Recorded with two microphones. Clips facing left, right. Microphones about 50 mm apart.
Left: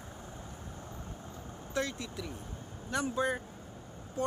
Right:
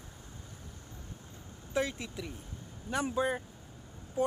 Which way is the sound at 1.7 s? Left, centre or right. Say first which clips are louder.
Right 2 dB; centre.